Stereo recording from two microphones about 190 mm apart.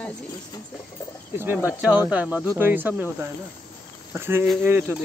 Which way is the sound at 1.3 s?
10° right (ahead or behind).